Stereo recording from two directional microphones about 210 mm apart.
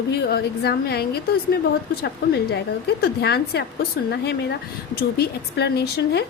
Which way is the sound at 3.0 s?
50° left (ahead or behind).